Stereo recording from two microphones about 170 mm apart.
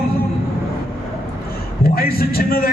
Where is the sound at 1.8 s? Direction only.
60° left (ahead or behind).